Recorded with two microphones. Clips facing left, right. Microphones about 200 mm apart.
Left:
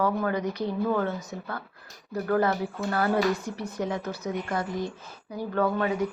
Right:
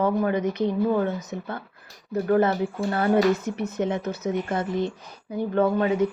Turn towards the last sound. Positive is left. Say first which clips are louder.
# right 4 dB
turn(degrees=-25)  # may be behind; listen again after turning